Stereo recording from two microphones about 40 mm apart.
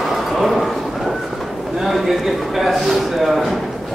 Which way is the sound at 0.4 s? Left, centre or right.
Centre.